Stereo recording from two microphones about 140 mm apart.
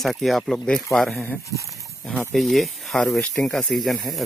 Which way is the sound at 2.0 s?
5° left (ahead or behind).